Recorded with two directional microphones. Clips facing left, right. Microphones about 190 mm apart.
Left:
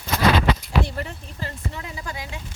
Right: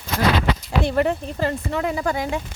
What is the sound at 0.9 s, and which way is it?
Speech, 70° right (ahead or behind).